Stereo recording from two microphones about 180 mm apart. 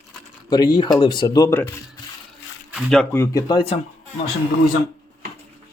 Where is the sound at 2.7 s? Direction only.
5° left (ahead or behind).